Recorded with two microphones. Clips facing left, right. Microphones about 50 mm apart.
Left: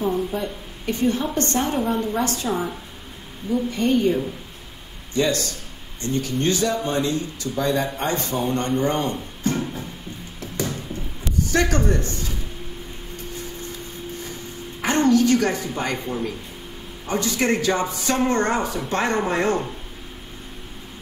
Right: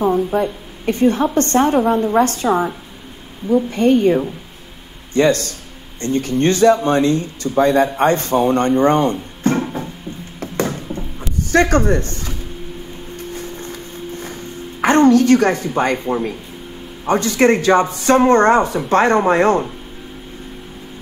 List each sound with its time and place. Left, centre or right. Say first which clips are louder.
0.0 s speech: right 7 dB; right
9.4 s music: right 7 dB; right
10.4 s a sound: right 7 dB; right
11.5 s speech: right 8 dB; right
13.1 s music: right 5 dB; right
17.0 s speech: right 9 dB; right